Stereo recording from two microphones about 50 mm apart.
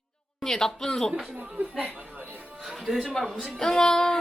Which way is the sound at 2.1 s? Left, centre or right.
Right.